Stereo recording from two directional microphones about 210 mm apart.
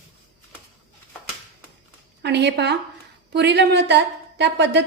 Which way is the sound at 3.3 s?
55° right (ahead or behind).